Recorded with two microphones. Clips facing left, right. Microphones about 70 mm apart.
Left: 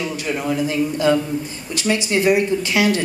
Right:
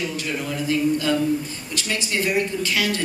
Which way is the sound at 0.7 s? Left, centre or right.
Left.